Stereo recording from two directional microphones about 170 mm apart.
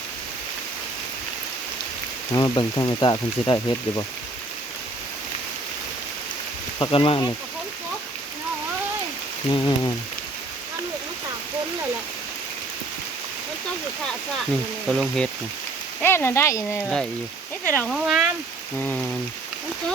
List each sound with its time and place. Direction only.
2.3 s speech: 20° left (ahead or behind)
6.7 s speech: 30° left (ahead or behind)
9.5 s speech: 25° left (ahead or behind)
14.8 s speech: 5° left (ahead or behind)
17.9 s speech: 5° right (ahead or behind)